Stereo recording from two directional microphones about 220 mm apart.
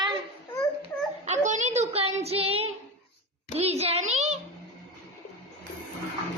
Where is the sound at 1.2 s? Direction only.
30° right (ahead or behind).